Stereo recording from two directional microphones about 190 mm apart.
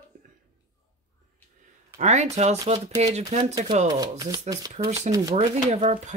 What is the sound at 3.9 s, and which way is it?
Speech, 20° right (ahead or behind).